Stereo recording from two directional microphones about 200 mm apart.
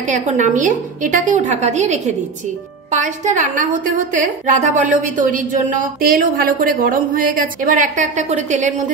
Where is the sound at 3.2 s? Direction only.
40° right (ahead or behind).